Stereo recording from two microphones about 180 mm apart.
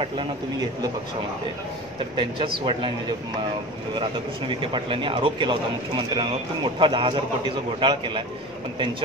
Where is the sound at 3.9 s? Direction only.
30° right (ahead or behind).